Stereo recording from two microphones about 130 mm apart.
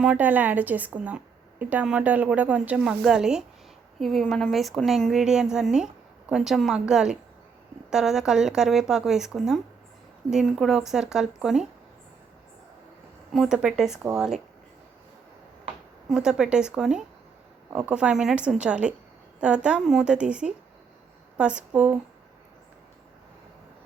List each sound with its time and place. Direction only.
0.0 s a woman's voice: 10° right (ahead or behind)
13.3 s a woman's voice: 5° right (ahead or behind)
16.0 s a woman's voice: 5° right (ahead or behind)